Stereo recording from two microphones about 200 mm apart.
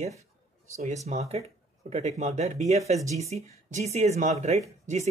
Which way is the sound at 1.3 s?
30° right (ahead or behind).